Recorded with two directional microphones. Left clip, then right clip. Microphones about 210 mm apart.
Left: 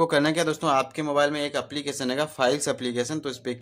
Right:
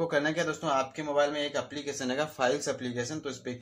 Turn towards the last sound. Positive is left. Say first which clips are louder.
# left 6 dB
turn(degrees=40)  # may be behind; listen again after turning